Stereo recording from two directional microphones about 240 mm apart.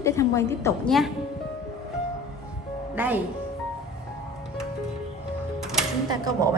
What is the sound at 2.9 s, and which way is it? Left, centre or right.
Speech, centre.